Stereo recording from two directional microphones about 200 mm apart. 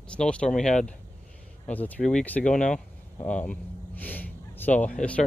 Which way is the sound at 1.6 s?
5° left (ahead or behind).